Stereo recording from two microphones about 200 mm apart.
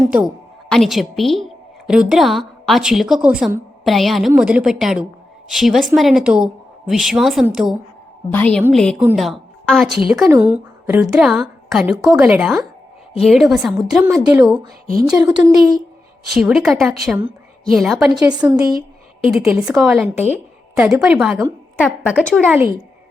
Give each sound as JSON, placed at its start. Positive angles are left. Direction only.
{"t": 0.7, "sound": "speech", "side_deg": 0}
{"t": 8.3, "sound": "a woman's voice", "side_deg": 10}
{"t": 10.2, "sound": "a woman's voice", "side_deg": -15}
{"t": 16.3, "sound": "speech", "side_deg": 0}
{"t": 18.4, "sound": "a woman's voice", "side_deg": -20}
{"t": 19.4, "sound": "speech", "side_deg": -5}
{"t": 22.4, "sound": "a woman's voice", "side_deg": -10}